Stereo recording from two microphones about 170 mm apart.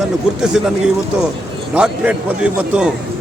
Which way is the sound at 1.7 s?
5° right (ahead or behind).